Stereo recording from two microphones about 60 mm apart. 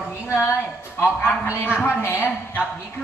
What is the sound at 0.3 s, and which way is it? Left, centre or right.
Speech, left.